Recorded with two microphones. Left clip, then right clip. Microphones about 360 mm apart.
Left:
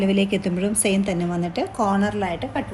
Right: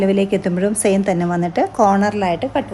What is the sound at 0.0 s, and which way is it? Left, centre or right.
A woman's voice, centre.